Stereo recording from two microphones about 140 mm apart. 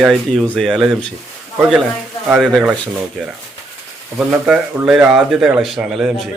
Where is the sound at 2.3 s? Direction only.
Centre (ahead or behind).